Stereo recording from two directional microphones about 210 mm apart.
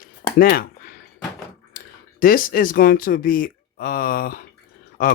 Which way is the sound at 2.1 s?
40° left (ahead or behind).